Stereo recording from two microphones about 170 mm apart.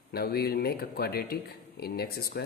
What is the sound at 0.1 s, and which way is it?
Speech, 65° left (ahead or behind).